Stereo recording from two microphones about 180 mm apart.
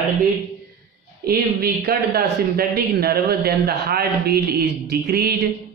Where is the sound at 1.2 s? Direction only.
60° right (ahead or behind).